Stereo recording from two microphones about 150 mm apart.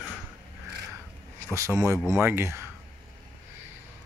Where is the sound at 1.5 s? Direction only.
20° right (ahead or behind).